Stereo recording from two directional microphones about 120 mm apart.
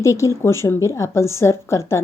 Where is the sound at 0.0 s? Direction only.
25° left (ahead or behind).